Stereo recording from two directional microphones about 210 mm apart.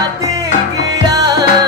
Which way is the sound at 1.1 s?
20° right (ahead or behind).